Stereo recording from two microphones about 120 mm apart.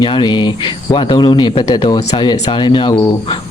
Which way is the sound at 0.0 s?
40° left (ahead or behind).